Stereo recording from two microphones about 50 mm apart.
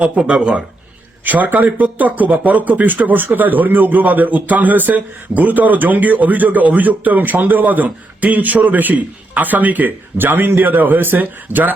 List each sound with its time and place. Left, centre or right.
0.0 s a man's voice: centre
1.2 s speech: right